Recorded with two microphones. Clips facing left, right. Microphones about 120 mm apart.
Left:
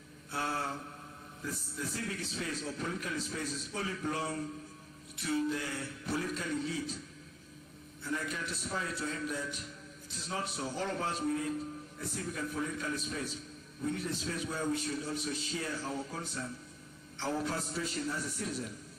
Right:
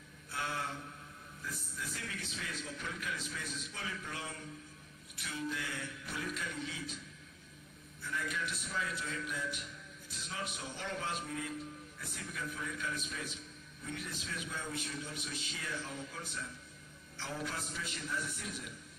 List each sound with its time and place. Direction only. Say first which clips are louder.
0.3 s a man's voice: left 4 dB; 35° left (ahead or behind)
8.0 s a man's voice: left 2 dB; 35° left (ahead or behind)